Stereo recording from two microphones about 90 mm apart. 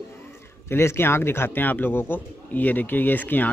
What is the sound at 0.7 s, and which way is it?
Speech, 30° left (ahead or behind).